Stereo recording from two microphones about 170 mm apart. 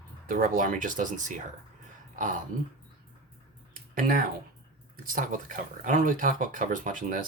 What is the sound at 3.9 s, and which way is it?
Speech, 55° right (ahead or behind).